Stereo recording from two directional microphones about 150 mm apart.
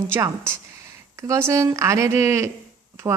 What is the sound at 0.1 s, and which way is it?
Speech, 15° right (ahead or behind).